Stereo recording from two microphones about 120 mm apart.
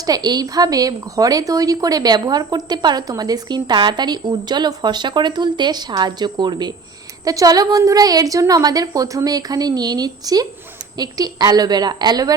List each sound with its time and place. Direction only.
0.0 s a woman's voice: 35° right (ahead or behind)